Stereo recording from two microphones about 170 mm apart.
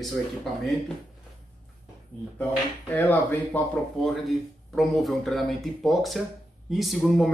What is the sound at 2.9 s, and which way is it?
Speech, 10° left (ahead or behind).